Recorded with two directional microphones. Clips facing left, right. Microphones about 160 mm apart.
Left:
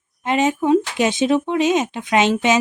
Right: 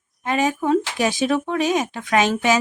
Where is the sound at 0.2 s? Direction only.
25° left (ahead or behind).